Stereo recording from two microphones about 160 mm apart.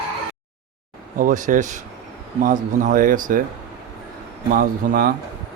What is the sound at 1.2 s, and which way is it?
Speech, 55° right (ahead or behind).